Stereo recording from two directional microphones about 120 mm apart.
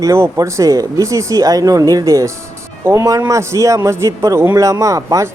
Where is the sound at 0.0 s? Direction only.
25° right (ahead or behind).